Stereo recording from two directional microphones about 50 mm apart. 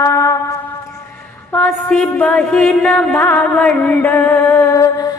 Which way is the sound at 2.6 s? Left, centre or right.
Centre.